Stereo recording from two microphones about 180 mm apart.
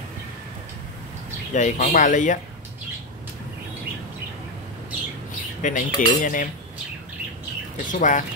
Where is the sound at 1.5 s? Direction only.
45° left (ahead or behind).